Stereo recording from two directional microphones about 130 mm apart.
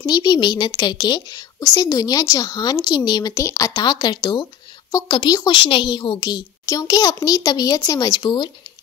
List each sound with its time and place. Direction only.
0.0 s a child's voice: 30° left (ahead or behind)
5.6 s a child's voice: 40° left (ahead or behind)